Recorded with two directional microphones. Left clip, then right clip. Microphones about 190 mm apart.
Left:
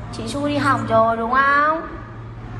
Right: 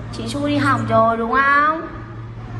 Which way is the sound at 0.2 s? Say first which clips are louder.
Right 1 dB; 30° left (ahead or behind).